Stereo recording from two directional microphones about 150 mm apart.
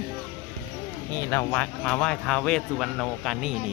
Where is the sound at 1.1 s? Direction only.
20° left (ahead or behind).